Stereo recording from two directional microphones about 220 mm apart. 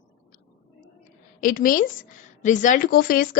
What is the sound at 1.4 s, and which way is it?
A woman's voice, 40° left (ahead or behind).